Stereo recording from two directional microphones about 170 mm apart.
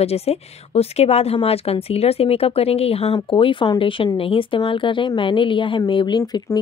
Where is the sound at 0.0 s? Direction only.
35° left (ahead or behind).